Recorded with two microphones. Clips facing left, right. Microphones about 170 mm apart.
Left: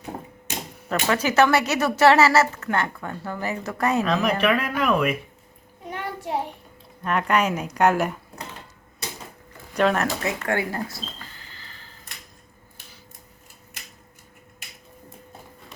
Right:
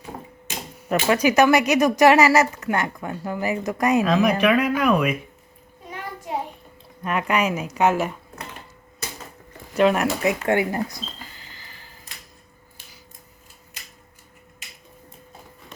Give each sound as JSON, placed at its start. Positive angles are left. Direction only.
{"t": 0.9, "sound": "speech", "side_deg": -15}
{"t": 7.0, "sound": "speech", "side_deg": -10}
{"t": 9.7, "sound": "speech", "side_deg": -10}